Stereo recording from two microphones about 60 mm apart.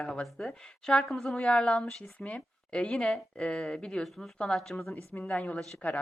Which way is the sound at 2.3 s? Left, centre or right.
Centre.